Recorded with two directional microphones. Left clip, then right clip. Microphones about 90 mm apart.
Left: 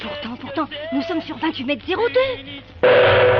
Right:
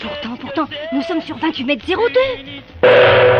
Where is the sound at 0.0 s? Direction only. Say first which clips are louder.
Right 3 dB; 25° right (ahead or behind).